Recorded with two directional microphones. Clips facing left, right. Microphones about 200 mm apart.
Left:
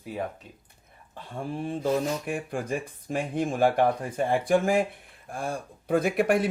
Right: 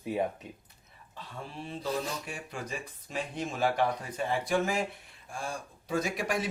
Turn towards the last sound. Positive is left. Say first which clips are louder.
# left 8 dB
turn(degrees=55)  # may be behind; listen again after turning